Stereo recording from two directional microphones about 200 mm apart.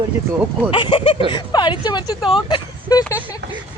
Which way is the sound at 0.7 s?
25° left (ahead or behind).